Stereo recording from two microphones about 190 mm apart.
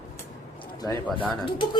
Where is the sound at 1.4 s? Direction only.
25° left (ahead or behind).